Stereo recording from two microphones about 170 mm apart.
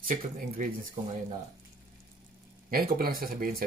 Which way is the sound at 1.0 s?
40° right (ahead or behind).